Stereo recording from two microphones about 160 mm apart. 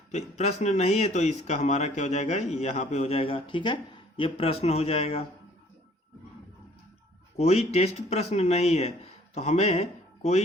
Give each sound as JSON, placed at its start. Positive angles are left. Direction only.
{"t": 0.1, "sound": "speech", "side_deg": 45}
{"t": 7.3, "sound": "speech", "side_deg": 40}